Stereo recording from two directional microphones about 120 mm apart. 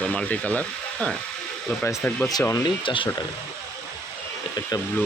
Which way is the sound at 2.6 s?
45° left (ahead or behind).